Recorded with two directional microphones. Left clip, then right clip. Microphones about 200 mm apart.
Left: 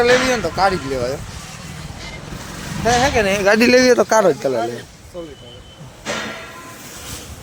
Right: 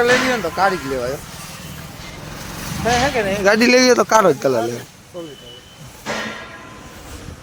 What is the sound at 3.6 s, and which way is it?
Speech, 5° right (ahead or behind).